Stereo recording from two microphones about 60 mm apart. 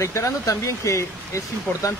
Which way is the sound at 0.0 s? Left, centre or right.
Left.